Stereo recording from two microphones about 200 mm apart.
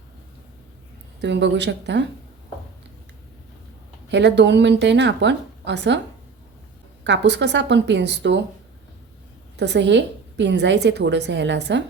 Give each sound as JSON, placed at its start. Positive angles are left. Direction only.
{"t": 1.2, "sound": "a woman's voice", "side_deg": -60}
{"t": 4.1, "sound": "a woman's voice", "side_deg": -60}
{"t": 7.0, "sound": "a woman's voice", "side_deg": -60}
{"t": 9.6, "sound": "a woman's voice", "side_deg": -60}